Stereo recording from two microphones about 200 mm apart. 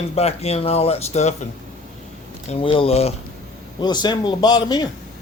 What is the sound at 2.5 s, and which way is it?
A man's voice, 25° left (ahead or behind).